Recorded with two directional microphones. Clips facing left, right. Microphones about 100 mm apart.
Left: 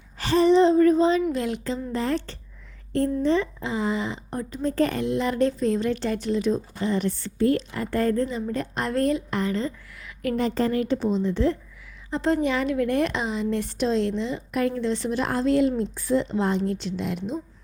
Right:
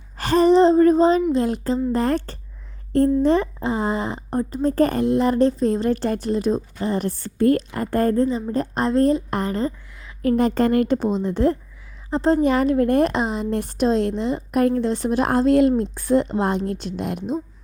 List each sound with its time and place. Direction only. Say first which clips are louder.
0.2 s a sound: right 3 dB; 50° right (ahead or behind)
1.3 s speech: right 6 dB; 35° right (ahead or behind)
8.1 s a woman's voice: right 5 dB; 30° right (ahead or behind)
10.3 s speech: right 5 dB; 55° right (ahead or behind)
12.1 s speech: right 5 dB; 35° right (ahead or behind)